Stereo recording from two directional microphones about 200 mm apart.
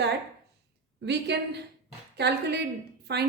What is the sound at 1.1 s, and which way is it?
A woman's voice, 55° right (ahead or behind).